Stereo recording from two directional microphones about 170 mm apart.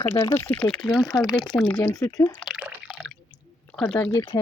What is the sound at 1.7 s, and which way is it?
Speech, 20° left (ahead or behind).